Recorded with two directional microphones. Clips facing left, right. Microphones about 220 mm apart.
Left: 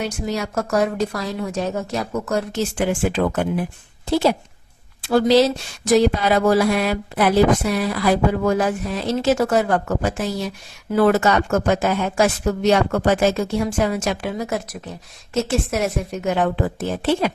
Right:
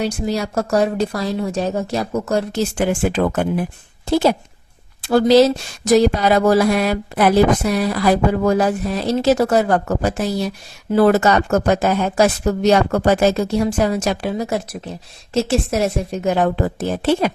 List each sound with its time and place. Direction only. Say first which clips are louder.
0.0 s a woman's voice: right 4 dB; 35° right (ahead or behind)
2.7 s speech: right 2 dB; 45° right (ahead or behind)
5.0 s a woman's voice: right 3 dB; 40° right (ahead or behind)